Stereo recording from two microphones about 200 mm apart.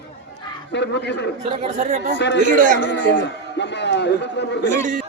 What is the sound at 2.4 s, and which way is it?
Speech, 40° right (ahead or behind).